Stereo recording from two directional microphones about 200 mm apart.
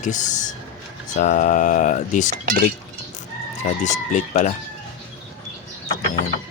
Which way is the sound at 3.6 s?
35° left (ahead or behind).